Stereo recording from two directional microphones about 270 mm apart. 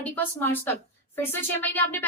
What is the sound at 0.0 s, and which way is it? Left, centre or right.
Speech, centre.